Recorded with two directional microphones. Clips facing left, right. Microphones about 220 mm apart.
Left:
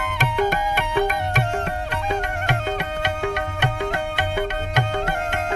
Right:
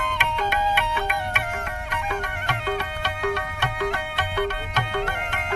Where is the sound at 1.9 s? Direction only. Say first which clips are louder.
Left 4 dB; 25° left (ahead or behind).